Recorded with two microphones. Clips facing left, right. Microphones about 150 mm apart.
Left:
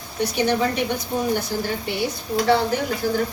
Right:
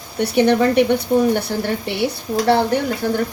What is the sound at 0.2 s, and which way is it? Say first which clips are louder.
Speech: right 6 dB; 60° right (ahead or behind).